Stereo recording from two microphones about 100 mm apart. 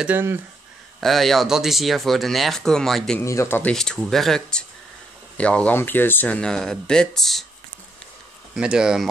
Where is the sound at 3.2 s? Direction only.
30° left (ahead or behind).